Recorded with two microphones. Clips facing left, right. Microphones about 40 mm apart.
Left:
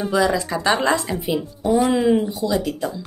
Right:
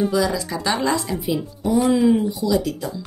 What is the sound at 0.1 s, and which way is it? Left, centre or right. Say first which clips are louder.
Speech: left 2 dB; left.